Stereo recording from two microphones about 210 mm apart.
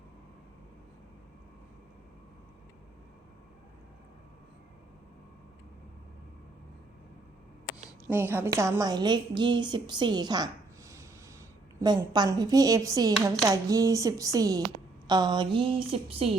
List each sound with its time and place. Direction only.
8.0 s a woman's voice: 10° right (ahead or behind); by 16.3 s 25° right (ahead or behind)